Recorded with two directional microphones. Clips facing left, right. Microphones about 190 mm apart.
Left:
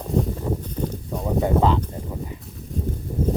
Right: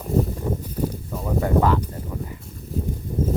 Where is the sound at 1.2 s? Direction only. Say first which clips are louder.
Left 1 dB; 20° left (ahead or behind).